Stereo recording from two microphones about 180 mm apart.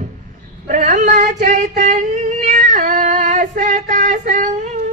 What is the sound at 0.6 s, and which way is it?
Female singing, 45° right (ahead or behind).